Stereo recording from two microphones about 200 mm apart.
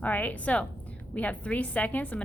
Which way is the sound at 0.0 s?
10° left (ahead or behind).